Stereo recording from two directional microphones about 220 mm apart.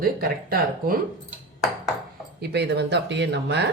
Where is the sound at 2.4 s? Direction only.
50° right (ahead or behind).